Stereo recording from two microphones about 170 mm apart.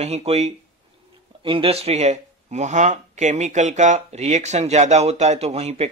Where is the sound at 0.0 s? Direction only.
40° right (ahead or behind).